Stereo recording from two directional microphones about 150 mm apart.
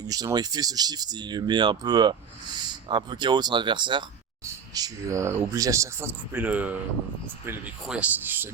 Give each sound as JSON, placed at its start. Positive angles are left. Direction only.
{"t": 0.0, "sound": "speech", "side_deg": -25}
{"t": 7.9, "sound": "speech", "side_deg": -10}